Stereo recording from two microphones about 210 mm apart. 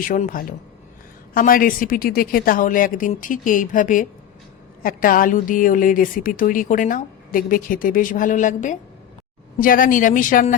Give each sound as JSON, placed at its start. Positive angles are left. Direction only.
{"t": 0.0, "sound": "a woman's voice", "side_deg": 40}